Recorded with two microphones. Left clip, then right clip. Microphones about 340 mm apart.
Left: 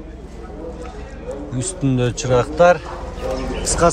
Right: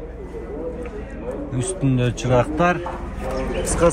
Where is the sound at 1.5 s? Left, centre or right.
Centre.